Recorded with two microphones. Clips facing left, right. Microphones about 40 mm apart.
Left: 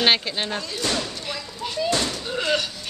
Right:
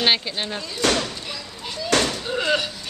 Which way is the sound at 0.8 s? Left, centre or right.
Right.